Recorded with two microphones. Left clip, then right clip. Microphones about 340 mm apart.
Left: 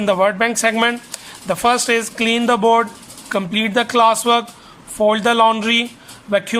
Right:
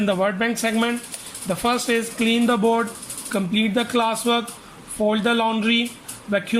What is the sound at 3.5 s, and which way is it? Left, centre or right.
Music, centre.